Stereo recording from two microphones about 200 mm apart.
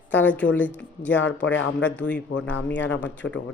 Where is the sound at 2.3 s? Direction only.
65° left (ahead or behind).